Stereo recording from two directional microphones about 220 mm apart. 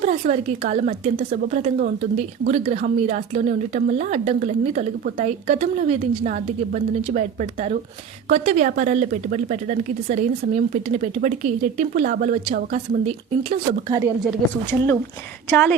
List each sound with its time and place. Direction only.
0.0 s a woman's voice: 30° right (ahead or behind)
14.7 s speech: 10° left (ahead or behind)